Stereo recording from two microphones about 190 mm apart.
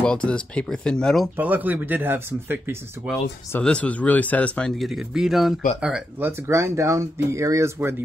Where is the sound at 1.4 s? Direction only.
10° right (ahead or behind).